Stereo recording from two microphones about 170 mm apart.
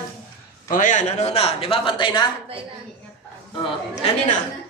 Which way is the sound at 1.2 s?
35° left (ahead or behind).